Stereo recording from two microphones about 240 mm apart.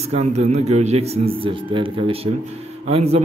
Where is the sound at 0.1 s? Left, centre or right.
Right.